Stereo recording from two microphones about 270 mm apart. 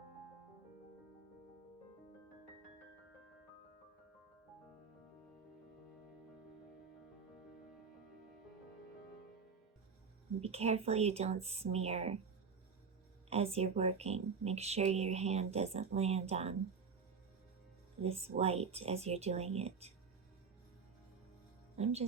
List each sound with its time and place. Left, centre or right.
10.4 s speech: right
13.3 s speech: right
18.0 s speech: right
21.8 s speech: right